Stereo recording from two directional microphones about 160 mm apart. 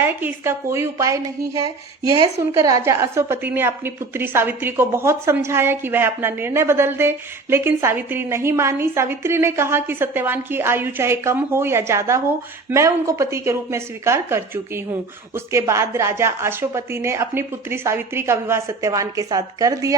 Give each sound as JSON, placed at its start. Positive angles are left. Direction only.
{"t": 0.0, "sound": "a woman's voice", "side_deg": -15}
{"t": 2.6, "sound": "a woman's voice", "side_deg": -20}